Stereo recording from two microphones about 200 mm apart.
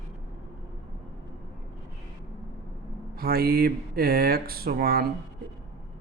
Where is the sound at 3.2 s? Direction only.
50° right (ahead or behind).